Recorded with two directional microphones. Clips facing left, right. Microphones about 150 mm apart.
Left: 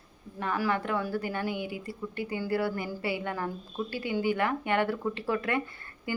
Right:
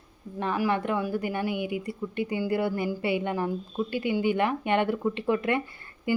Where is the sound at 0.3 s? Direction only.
20° right (ahead or behind).